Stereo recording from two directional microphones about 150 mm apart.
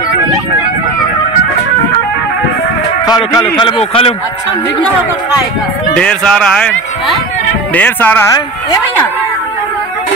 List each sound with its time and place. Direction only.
3.1 s a man's voice: 25° left (ahead or behind)
5.9 s speech: 5° left (ahead or behind)
7.7 s speech: 10° left (ahead or behind)